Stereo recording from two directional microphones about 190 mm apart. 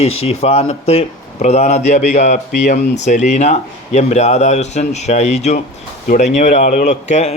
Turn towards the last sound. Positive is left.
turn(degrees=40)  # may be behind; listen again after turning